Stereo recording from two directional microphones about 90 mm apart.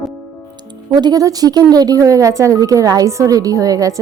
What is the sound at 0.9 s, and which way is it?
Speech, 50° right (ahead or behind).